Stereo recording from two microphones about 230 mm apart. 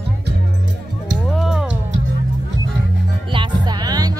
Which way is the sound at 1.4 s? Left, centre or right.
Centre.